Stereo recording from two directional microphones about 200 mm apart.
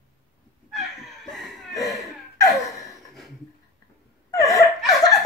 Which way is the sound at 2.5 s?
Centre (ahead or behind).